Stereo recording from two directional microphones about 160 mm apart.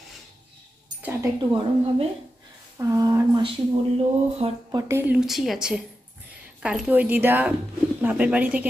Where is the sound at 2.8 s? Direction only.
20° right (ahead or behind).